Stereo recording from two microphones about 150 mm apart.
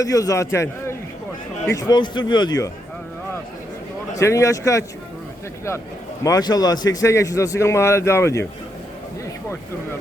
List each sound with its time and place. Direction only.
0.0 s a man's voice: 20° left (ahead or behind)
4.2 s a man's voice: 20° left (ahead or behind)
6.2 s a man's voice: 25° left (ahead or behind)